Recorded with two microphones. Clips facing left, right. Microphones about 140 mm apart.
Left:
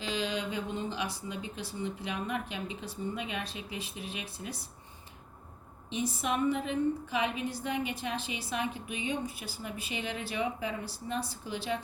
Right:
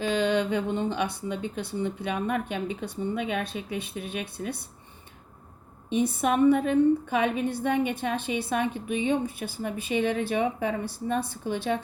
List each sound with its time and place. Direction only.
0.0 s speech: 55° right (ahead or behind)
5.9 s a woman's voice: 55° right (ahead or behind)